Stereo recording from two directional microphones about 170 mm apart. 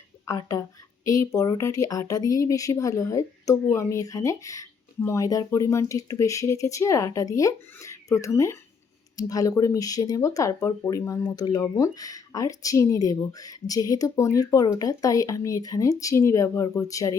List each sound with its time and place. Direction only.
0.3 s speech: 20° left (ahead or behind)